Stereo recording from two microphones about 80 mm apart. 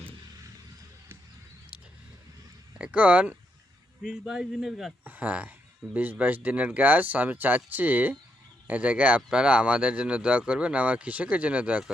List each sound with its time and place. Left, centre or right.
2.7 s speech: centre
4.0 s a man's voice: centre
5.0 s speech: centre